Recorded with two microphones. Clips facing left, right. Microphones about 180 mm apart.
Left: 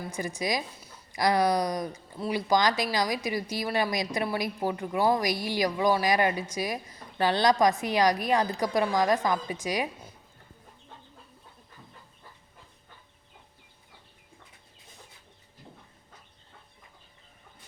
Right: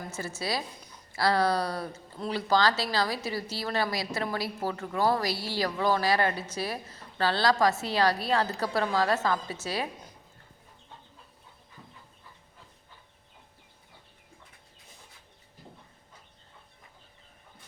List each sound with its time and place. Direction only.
0.0 s a woman's voice: 15° left (ahead or behind)